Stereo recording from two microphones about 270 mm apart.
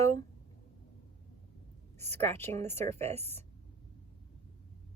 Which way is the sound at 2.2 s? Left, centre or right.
Centre.